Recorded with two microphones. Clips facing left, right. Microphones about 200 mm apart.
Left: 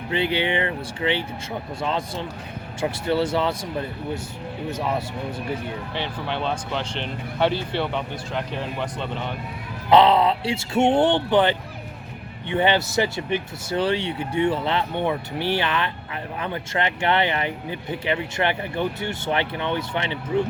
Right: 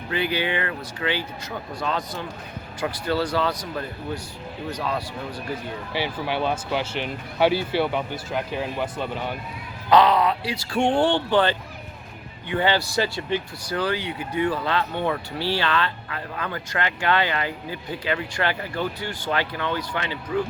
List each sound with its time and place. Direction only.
0.1 s speech: 25° left (ahead or behind)
5.9 s speech: 5° right (ahead or behind)
9.9 s speech: 25° left (ahead or behind)